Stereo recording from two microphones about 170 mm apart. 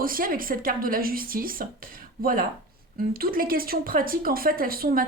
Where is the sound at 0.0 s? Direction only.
55° right (ahead or behind).